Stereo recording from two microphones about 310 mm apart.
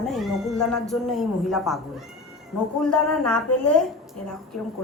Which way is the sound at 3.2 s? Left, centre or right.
Left.